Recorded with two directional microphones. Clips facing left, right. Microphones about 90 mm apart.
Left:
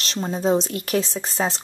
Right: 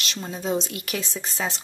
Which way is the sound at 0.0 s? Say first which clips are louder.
Left 7 dB; 35° left (ahead or behind).